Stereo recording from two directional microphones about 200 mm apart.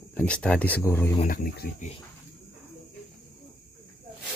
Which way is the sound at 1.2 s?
40° left (ahead or behind).